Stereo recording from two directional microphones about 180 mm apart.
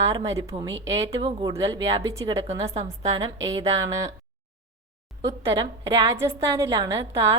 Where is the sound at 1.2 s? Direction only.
25° right (ahead or behind).